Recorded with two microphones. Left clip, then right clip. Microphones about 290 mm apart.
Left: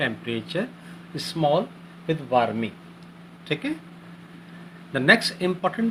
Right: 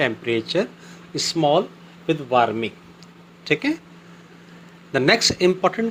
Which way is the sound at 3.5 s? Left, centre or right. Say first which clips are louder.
Right 7 dB; right.